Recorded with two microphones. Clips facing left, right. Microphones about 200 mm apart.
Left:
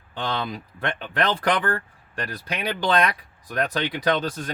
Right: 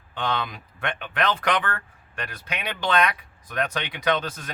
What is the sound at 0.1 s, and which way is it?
Speech, 35° left (ahead or behind).